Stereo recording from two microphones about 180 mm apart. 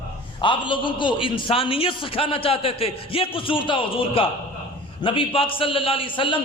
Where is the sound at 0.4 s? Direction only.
25° left (ahead or behind).